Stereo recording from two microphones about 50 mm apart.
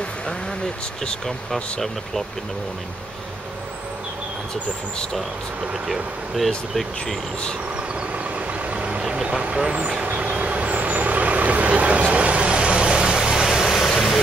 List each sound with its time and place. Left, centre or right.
1.2 s speech: centre
5.6 s speech: centre
6.3 s speech: centre
8.6 s vehicle: right
9.1 s speech: right
10.0 s vehicle: right; by 14.2 s centre